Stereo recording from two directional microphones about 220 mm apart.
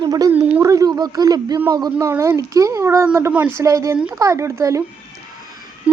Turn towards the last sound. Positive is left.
turn(degrees=-5)  # may be behind; listen again after turning